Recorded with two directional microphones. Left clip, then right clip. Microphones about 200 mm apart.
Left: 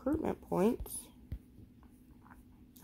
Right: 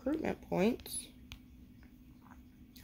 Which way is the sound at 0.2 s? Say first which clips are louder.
Left 1 dB; 10° left (ahead or behind).